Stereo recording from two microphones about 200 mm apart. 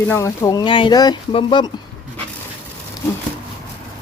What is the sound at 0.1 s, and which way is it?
Speech, 15° left (ahead or behind).